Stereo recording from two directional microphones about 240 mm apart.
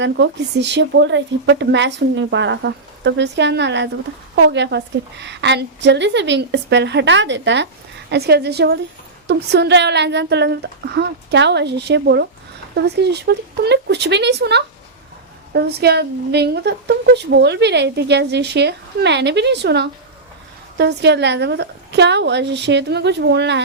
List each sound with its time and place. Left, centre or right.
0.0 s a woman's voice: right